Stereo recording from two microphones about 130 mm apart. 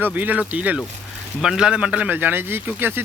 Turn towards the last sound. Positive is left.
turn(degrees=-15)  # may be behind; listen again after turning